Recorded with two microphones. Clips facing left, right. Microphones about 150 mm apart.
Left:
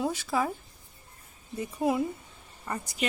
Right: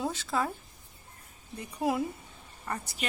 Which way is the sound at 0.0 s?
5° left (ahead or behind).